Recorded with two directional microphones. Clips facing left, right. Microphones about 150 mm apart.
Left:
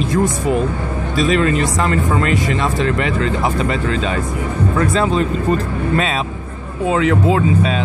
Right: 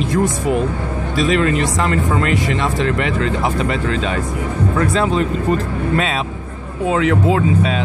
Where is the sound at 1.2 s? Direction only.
35° left (ahead or behind).